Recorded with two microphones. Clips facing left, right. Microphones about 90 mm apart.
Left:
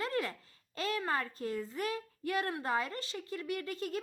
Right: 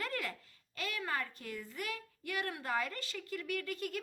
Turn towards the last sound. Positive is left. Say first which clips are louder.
# left 2 dB
turn(degrees=30)  # may be behind; listen again after turning